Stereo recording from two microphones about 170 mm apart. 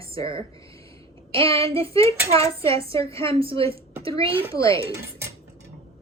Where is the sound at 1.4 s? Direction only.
20° left (ahead or behind).